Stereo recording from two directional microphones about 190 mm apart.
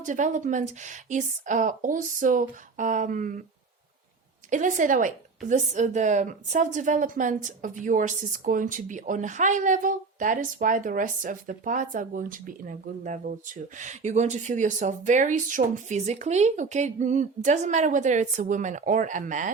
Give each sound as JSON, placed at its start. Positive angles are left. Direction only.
{"t": 0.0, "sound": "speech", "side_deg": -40}
{"t": 4.4, "sound": "speech", "side_deg": -40}